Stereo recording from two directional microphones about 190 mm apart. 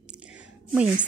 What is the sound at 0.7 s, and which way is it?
Speech, 5° right (ahead or behind).